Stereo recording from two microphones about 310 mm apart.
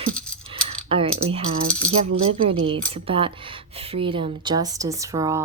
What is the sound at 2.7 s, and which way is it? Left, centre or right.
Speech, centre.